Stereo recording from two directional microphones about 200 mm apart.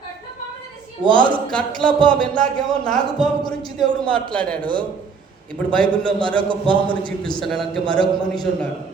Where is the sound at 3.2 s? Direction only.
20° left (ahead or behind).